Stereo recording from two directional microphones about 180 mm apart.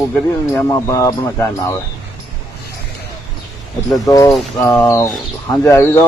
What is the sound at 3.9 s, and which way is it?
Speech, 20° left (ahead or behind).